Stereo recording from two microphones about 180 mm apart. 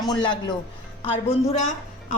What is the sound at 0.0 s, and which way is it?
A man's voice, 25° left (ahead or behind).